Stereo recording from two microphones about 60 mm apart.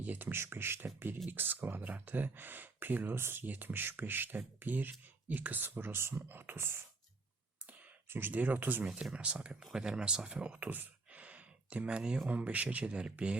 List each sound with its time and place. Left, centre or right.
0.0 s speech: right
0.3 s speech: right
6.2 s speech: right
8.1 s speech: right
8.9 s speech: centre
9.1 s speech: centre
9.5 s speech: centre
12.3 s speech: right